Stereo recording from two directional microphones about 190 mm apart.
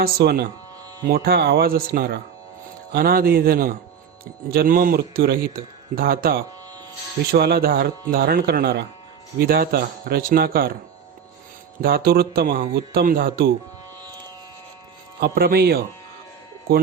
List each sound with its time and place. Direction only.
0.0 s a man's voice: 55° right (ahead or behind)
11.8 s a man's voice: 50° right (ahead or behind)
15.2 s speech: 55° right (ahead or behind)